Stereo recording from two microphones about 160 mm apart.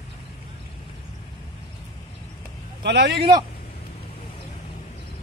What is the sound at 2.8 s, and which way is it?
Speech, 90° right.